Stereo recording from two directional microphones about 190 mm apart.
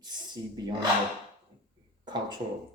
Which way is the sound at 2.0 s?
25° right (ahead or behind).